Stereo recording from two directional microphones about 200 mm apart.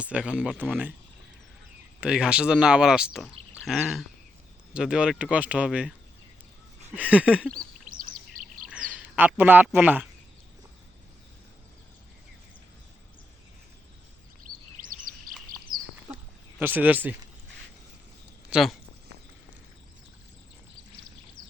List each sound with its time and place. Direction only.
0.0 s speech: 5° right (ahead or behind)
2.0 s speech: 5° right (ahead or behind)
6.9 s speech: 5° right (ahead or behind)
7.9 s bird: 45° right (ahead or behind)
8.7 s speech: 5° right (ahead or behind)
14.4 s bird vocalization: 45° right (ahead or behind)
16.6 s speech: 10° right (ahead or behind)
18.5 s speech: centre (ahead or behind)